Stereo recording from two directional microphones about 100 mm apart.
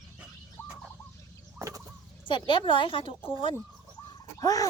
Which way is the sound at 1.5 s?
30° right (ahead or behind).